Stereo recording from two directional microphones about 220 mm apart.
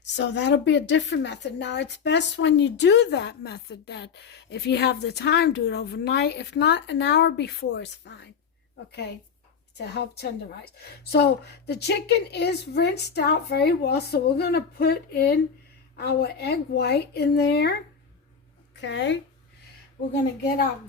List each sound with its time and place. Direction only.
0.0 s a woman's voice: 50° left (ahead or behind)
18.8 s a woman's voice: 50° left (ahead or behind)